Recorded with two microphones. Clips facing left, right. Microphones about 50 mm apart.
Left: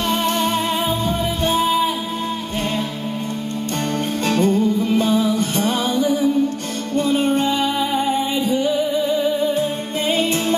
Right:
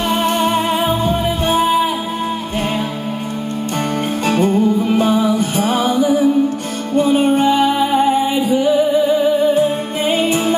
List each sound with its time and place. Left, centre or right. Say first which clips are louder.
0.1 s music: right 4 dB; centre
4.3 s music: right 3 dB; centre